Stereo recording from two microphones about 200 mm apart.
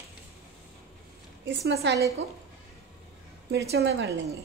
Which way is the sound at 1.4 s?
60° right (ahead or behind).